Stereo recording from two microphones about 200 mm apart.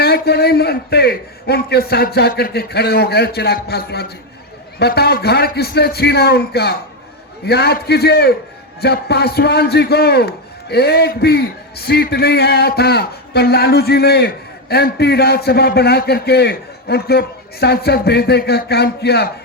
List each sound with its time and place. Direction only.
0.0 s a man's voice: 50° left (ahead or behind)